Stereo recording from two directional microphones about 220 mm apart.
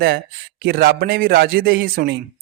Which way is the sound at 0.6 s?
45° right (ahead or behind).